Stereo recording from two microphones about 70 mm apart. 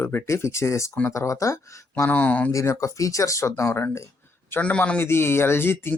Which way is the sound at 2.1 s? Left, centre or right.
Left.